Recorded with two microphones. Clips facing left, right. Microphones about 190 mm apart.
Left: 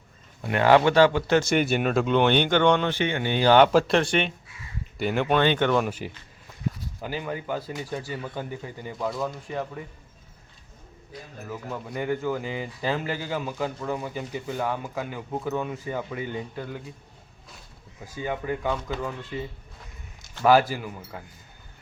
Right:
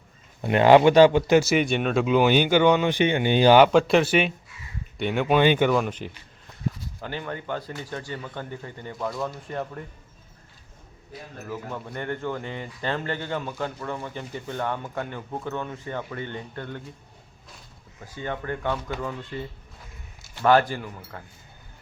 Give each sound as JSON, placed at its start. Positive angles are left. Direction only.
{"t": 0.4, "sound": "speech", "side_deg": -20}
{"t": 3.6, "sound": "speech", "side_deg": 0}
{"t": 5.4, "sound": "speech", "side_deg": -10}
{"t": 5.8, "sound": "speech", "side_deg": 10}
{"t": 11.1, "sound": "speech", "side_deg": 5}
{"t": 18.0, "sound": "speech", "side_deg": 10}